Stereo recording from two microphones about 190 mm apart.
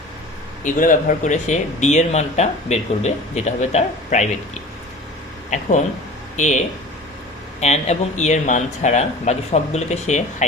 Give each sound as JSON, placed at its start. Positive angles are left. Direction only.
{"t": 0.6, "sound": "speech", "side_deg": 45}